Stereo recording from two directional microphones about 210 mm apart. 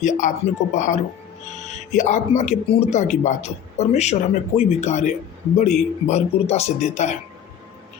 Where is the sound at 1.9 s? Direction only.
35° left (ahead or behind).